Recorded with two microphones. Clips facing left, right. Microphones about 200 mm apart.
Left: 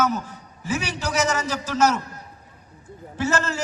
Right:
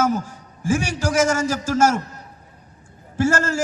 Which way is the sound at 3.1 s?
45° right (ahead or behind).